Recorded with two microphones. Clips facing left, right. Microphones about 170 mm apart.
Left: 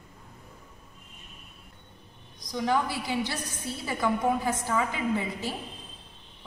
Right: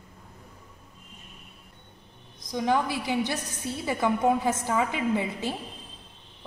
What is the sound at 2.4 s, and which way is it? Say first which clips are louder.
A woman's voice: right 2 dB; 20° right (ahead or behind).